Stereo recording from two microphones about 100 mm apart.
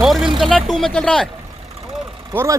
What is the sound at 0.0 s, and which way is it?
Music, centre (ahead or behind).